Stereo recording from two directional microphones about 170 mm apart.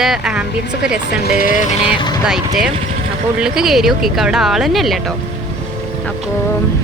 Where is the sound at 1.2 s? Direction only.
60° left (ahead or behind); by 1.8 s 45° left (ahead or behind).